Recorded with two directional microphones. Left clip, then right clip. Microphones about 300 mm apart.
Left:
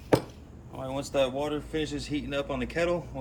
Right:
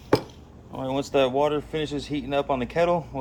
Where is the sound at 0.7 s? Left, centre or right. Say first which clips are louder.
Right 6 dB; right.